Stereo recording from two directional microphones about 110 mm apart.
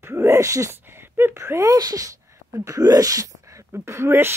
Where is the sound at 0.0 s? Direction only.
25° right (ahead or behind).